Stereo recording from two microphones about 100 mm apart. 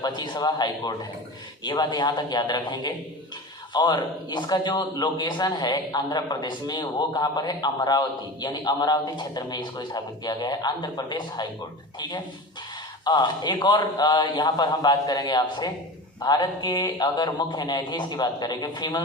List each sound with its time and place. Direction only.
0.0 s a man's voice: 40° left (ahead or behind)